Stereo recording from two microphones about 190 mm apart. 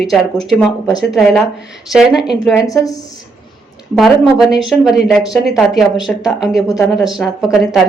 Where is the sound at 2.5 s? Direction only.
15° left (ahead or behind).